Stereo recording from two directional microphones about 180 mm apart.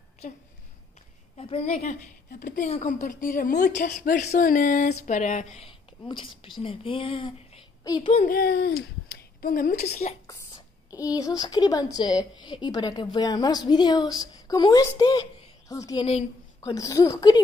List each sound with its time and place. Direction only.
1.3 s a woman's voice: 30° left (ahead or behind)
1.7 s a woman's voice: 45° left (ahead or behind)
5.7 s a woman's voice: 30° left (ahead or behind)
8.0 s speech: 45° left (ahead or behind)
10.9 s a woman's voice: 20° left (ahead or behind)